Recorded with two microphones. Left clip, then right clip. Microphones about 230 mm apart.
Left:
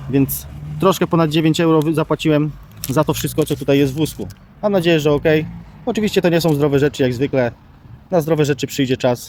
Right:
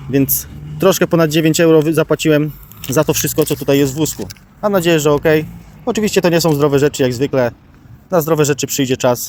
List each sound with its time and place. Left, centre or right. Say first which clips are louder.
0.1 s speech: right 2 dB; centre